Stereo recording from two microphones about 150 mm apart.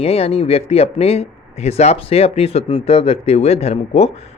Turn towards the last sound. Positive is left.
turn(degrees=45)  # may be behind; listen again after turning